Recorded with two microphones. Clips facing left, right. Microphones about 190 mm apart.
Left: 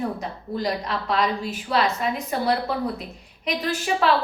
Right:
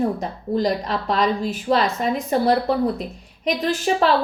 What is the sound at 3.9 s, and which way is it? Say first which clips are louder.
Speech: right 4 dB; 40° right (ahead or behind).